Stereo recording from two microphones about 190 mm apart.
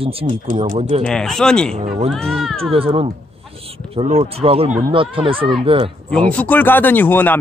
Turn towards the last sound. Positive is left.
turn(degrees=10)  # may be behind; listen again after turning